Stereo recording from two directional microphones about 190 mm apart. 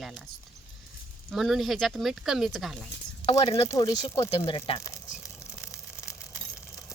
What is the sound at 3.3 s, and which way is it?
Speech, 35° left (ahead or behind).